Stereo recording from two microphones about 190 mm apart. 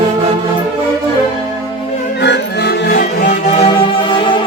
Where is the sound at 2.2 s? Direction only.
65° left (ahead or behind).